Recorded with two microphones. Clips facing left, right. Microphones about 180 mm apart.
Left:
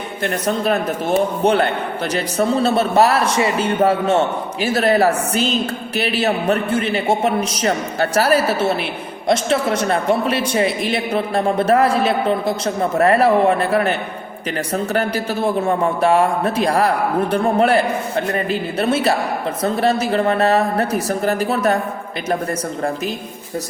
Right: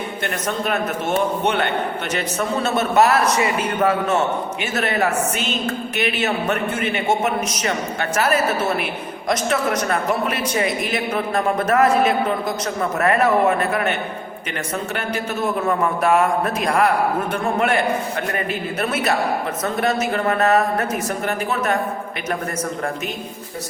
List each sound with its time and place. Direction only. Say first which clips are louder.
0.2 s a man's voice: left 6 dB; 35° left (ahead or behind)
14.9 s a man's voice: left 5 dB; 35° left (ahead or behind)